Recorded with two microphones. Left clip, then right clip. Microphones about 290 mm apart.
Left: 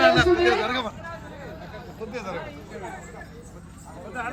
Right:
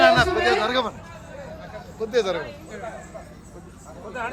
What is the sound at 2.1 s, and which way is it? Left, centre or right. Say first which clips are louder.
Speech: right 11 dB; centre.